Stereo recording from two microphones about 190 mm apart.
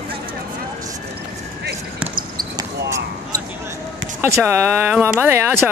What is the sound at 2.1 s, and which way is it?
Basketball bounce, 20° right (ahead or behind).